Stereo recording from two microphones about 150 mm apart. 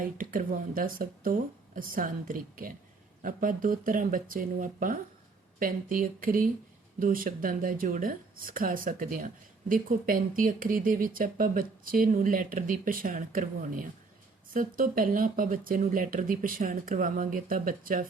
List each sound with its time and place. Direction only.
0.0 s speech: 65° right (ahead or behind)